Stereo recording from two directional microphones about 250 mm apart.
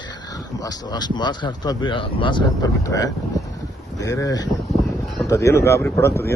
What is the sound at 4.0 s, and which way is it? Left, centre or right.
Speech, centre.